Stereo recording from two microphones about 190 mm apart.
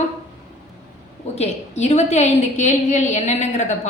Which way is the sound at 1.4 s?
35° left (ahead or behind).